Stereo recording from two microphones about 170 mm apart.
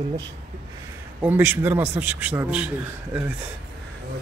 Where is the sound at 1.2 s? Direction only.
10° right (ahead or behind).